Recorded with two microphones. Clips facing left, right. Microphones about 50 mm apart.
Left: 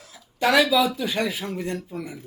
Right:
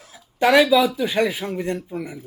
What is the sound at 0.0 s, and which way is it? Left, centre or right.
Speech, centre.